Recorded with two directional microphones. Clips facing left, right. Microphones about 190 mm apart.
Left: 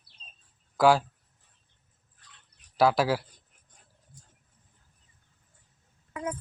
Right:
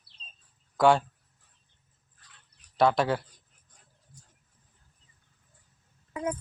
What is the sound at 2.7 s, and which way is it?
Speech, 5° left (ahead or behind).